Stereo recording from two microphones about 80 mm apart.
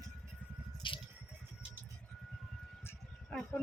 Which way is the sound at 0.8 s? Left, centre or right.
Left.